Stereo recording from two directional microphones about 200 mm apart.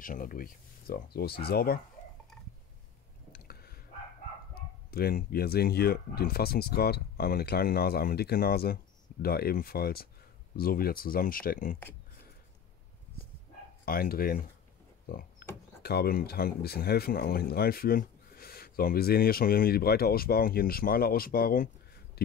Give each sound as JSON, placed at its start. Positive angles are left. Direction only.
{"t": 0.0, "sound": "speech", "side_deg": 45}
{"t": 3.3, "sound": "a sound", "side_deg": 50}
{"t": 4.6, "sound": "speech", "side_deg": 50}
{"t": 13.8, "sound": "speech", "side_deg": 45}
{"t": 15.0, "sound": "a sound", "side_deg": 45}
{"t": 15.8, "sound": "speech", "side_deg": 50}